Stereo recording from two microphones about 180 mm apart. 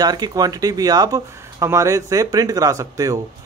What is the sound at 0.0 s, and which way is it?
Speech, 20° right (ahead or behind).